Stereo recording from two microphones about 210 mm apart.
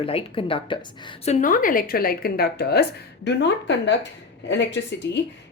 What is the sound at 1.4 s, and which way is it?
Speech, 40° left (ahead or behind).